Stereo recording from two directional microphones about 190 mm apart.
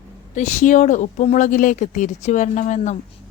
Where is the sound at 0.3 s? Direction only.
40° left (ahead or behind).